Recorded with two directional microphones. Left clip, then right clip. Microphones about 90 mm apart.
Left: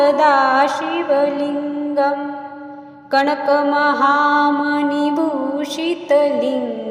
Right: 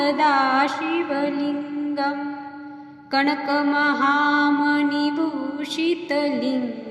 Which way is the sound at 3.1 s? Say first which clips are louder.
Left 6 dB; 30° left (ahead or behind).